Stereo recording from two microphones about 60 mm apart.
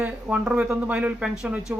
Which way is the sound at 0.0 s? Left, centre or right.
Centre.